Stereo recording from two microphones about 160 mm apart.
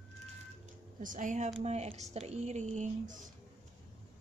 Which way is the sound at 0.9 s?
55° right (ahead or behind).